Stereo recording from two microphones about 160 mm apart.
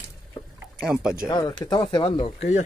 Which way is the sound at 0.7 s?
5° right (ahead or behind).